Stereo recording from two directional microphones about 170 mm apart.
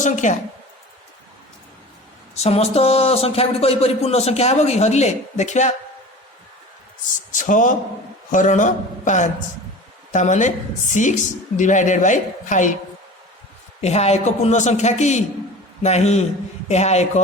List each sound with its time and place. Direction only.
0.0 s a woman's voice: 45° left (ahead or behind)
2.3 s speech: 35° left (ahead or behind)
7.3 s a woman's voice: 50° left (ahead or behind)
13.8 s speech: 40° left (ahead or behind)